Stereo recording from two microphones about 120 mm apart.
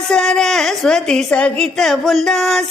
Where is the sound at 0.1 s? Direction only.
5° left (ahead or behind).